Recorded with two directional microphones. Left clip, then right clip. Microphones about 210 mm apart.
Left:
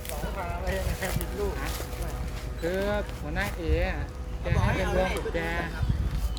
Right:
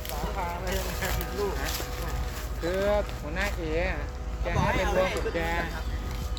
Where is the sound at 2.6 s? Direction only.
55° left (ahead or behind).